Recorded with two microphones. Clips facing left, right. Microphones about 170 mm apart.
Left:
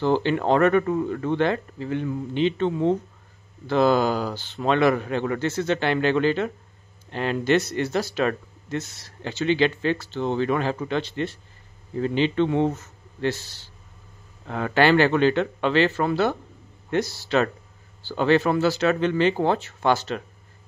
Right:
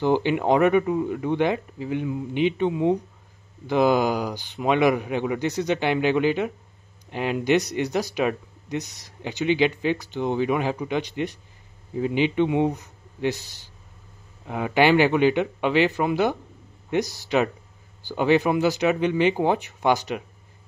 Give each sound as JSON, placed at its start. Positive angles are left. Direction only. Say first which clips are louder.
{"t": 0.0, "sound": "a man's voice", "louder": "even", "side_deg": -15}